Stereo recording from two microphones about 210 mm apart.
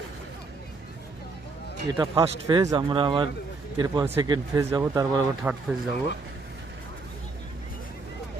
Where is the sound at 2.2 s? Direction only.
20° right (ahead or behind).